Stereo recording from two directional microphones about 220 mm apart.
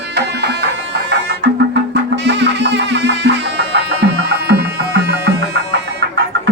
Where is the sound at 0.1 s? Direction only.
50° right (ahead or behind).